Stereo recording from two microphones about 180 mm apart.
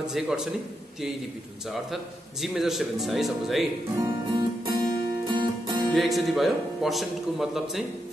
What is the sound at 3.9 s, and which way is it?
Guitar, 20° right (ahead or behind).